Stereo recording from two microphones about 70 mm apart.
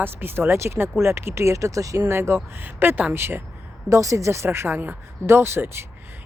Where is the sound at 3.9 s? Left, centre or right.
Right.